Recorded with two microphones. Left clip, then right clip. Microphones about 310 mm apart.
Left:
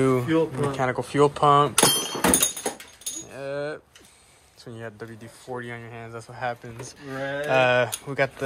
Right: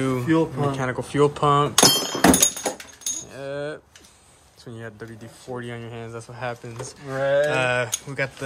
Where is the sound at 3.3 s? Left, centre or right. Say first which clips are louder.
Left 3 dB; centre.